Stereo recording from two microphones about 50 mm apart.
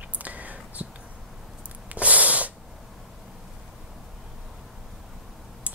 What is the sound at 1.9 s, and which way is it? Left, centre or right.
Snort, right.